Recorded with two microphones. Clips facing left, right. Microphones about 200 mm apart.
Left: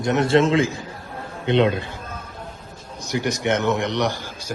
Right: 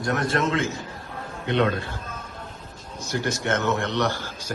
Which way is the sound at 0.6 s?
90° left.